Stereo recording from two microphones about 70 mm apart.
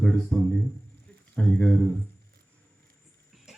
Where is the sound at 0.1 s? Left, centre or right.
Centre.